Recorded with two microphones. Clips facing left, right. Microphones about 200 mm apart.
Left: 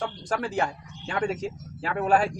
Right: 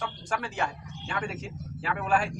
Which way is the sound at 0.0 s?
35° left (ahead or behind).